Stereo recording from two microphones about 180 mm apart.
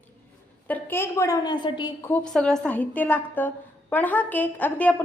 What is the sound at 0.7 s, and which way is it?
A woman's voice, 10° left (ahead or behind).